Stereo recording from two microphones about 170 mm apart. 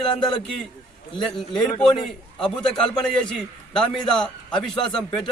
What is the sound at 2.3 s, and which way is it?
A man's voice, 5° left (ahead or behind).